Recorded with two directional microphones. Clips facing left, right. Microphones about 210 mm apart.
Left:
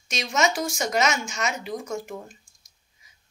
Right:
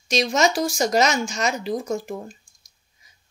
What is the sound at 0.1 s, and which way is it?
A woman's voice, 35° right (ahead or behind).